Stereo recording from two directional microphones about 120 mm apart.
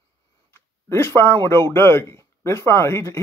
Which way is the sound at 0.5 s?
20° left (ahead or behind).